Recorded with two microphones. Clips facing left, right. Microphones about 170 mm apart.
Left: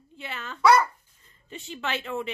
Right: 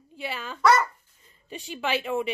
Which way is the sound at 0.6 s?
Centre (ahead or behind).